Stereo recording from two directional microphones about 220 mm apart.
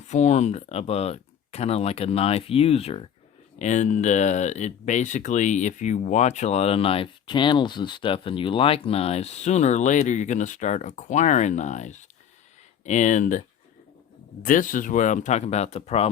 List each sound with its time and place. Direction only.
0.1 s speech: 30° left (ahead or behind)
14.4 s speech: 35° left (ahead or behind)